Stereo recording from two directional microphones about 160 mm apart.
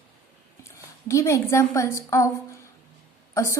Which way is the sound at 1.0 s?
20° left (ahead or behind).